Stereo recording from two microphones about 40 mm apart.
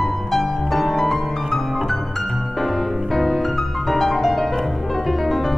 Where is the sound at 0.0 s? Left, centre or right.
Centre.